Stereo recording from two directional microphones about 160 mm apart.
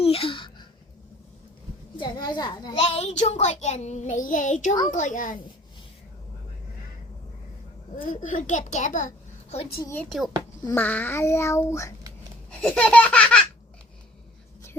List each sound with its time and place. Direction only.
0.0 s speech: 35° left (ahead or behind)
2.0 s children playing: 25° left (ahead or behind)
2.7 s child singing: 40° left (ahead or behind); by 5.4 s 55° left (ahead or behind)
7.9 s a child's voice: 55° left (ahead or behind)
9.8 s a child's voice: 15° left (ahead or behind)
10.1 s a child's voice: centre (ahead or behind); by 11.9 s 20° left (ahead or behind)
12.5 s a child's voice: 5° left (ahead or behind)